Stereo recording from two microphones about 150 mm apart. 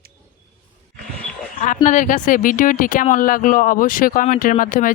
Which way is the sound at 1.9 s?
60° left (ahead or behind).